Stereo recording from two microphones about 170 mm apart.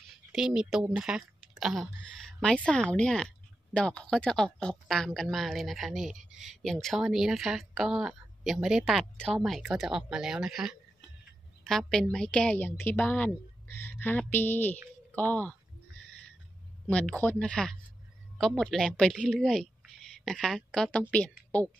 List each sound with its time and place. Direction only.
0.3 s a woman's voice: 5° right (ahead or behind)
16.9 s a woman's voice: 5° left (ahead or behind)